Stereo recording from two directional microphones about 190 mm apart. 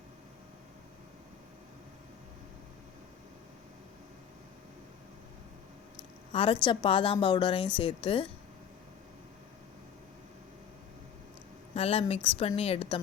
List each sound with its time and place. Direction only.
6.3 s a woman's voice: 30° left (ahead or behind)
11.7 s a woman's voice: 30° left (ahead or behind)